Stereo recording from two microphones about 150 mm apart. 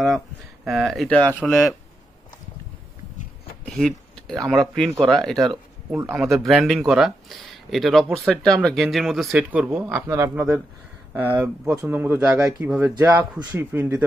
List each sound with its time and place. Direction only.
0.7 s speech: centre (ahead or behind)
3.6 s speech: 5° left (ahead or behind)
5.9 s speech: 15° right (ahead or behind)
6.3 s speech: centre (ahead or behind)